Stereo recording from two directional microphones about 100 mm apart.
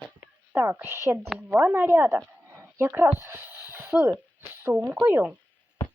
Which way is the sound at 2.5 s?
30° right (ahead or behind).